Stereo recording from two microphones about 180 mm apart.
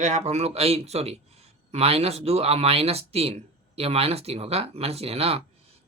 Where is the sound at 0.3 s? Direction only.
35° right (ahead or behind).